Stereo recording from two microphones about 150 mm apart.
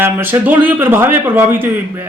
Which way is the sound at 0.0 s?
15° right (ahead or behind).